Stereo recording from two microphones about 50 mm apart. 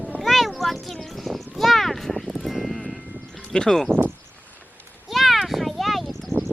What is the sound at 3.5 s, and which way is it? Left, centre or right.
Speech, centre.